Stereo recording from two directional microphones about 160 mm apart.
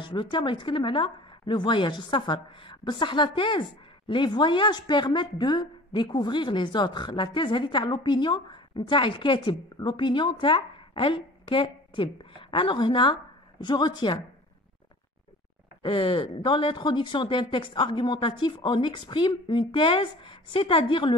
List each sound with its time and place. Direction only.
0.0 s a woman's voice: 30° left (ahead or behind)
15.8 s speech: 30° left (ahead or behind)